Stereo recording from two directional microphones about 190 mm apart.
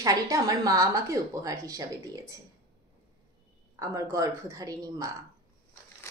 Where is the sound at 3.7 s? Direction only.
15° right (ahead or behind).